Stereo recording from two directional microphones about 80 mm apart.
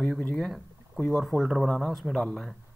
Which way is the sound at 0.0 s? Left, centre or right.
Centre.